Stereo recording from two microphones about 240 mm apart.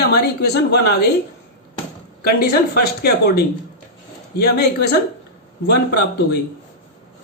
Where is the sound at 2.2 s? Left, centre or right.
Left.